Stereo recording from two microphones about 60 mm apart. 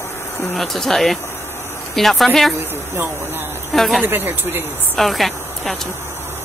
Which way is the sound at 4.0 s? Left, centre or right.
Right.